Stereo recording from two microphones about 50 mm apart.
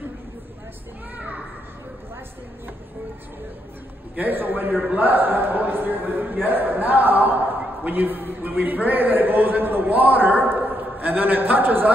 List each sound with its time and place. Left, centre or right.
1.1 s children playing: right
4.1 s a man's voice: right